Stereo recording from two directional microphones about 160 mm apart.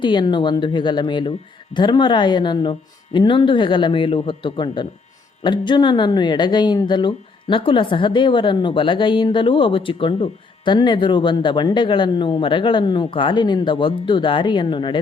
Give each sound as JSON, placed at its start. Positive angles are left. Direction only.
{"t": 0.0, "sound": "speech", "side_deg": 30}